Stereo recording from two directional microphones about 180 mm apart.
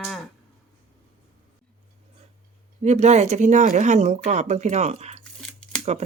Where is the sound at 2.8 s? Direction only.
40° right (ahead or behind).